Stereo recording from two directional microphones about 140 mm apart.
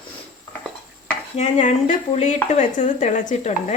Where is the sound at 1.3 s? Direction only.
55° left (ahead or behind).